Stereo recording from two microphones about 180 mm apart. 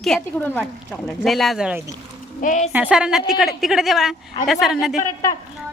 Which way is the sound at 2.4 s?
45° left (ahead or behind).